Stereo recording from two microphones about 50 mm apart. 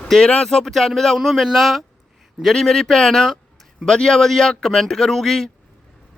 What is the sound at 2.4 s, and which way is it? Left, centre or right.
Speech, centre.